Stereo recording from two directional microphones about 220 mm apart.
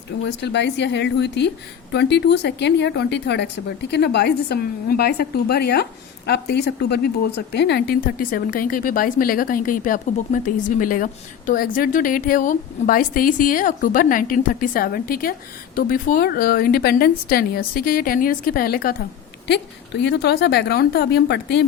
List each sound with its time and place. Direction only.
0.3 s a woman's voice: 50° left (ahead or behind)